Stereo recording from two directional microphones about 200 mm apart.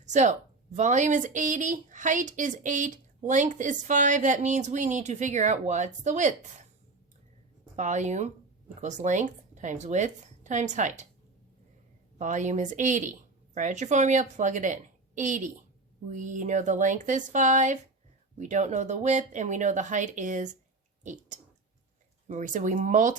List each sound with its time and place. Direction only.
0.0 s speech: 35° right (ahead or behind)
7.8 s a woman's voice: 35° right (ahead or behind)
12.2 s speech: 40° right (ahead or behind)